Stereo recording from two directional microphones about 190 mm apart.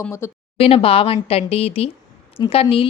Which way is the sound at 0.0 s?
15° left (ahead or behind).